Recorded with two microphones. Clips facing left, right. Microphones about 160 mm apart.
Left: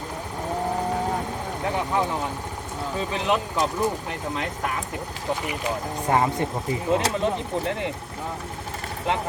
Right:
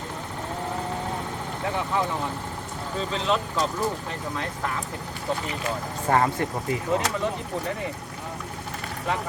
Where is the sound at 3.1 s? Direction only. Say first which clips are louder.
Left 1 dB; 15° left (ahead or behind).